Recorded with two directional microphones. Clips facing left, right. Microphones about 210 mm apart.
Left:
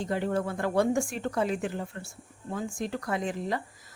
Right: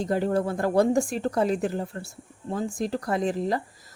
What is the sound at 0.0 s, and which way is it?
Speech, 40° right (ahead or behind).